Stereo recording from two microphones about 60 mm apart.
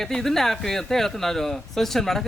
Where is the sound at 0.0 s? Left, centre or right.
Centre.